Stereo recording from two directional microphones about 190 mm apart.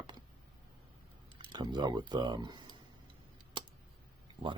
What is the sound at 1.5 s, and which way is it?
Speech, 25° right (ahead or behind).